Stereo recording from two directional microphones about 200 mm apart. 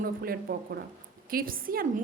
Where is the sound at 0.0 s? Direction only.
50° right (ahead or behind).